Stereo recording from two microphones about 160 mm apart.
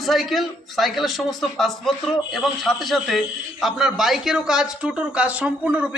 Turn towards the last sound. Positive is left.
turn(degrees=-10)  # may be behind; listen again after turning